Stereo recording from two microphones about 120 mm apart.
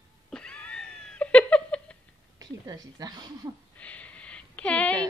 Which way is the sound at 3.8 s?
10° left (ahead or behind).